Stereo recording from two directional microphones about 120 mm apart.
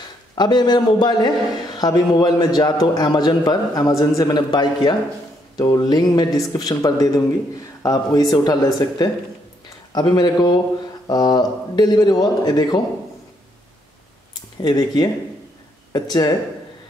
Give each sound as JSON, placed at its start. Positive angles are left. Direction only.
{"t": 0.4, "sound": "speech", "side_deg": 35}
{"t": 14.6, "sound": "speech", "side_deg": 35}